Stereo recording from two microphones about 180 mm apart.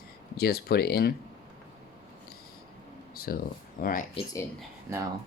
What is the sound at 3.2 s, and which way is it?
Speech, 55° left (ahead or behind).